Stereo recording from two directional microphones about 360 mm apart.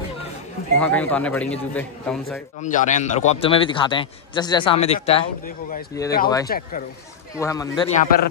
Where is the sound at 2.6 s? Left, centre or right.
Left.